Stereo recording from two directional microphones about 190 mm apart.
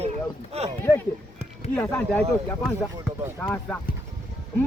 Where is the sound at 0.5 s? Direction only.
35° right (ahead or behind).